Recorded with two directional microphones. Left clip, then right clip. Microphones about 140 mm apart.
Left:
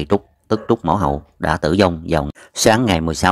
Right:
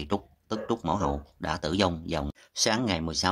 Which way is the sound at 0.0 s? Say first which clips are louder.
Left 13 dB; 45° left (ahead or behind).